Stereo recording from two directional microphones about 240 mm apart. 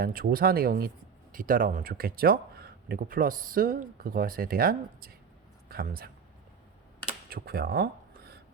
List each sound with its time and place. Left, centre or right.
0.0 s speech: right
7.3 s speech: right